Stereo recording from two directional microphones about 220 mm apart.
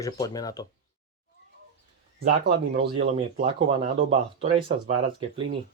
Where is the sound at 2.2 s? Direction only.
40° right (ahead or behind).